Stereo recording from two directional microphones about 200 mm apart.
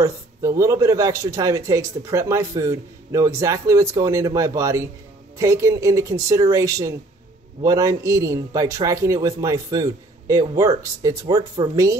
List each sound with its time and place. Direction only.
0.0 s speech: 15° right (ahead or behind)